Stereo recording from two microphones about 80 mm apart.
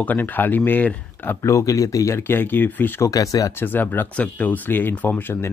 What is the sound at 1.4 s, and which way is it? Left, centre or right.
Speech, left.